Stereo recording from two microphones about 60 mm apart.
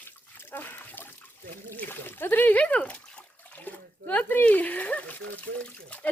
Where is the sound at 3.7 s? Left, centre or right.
Left.